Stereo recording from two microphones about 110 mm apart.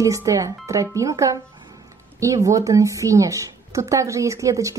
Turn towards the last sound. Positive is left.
turn(degrees=-30)  # may be behind; listen again after turning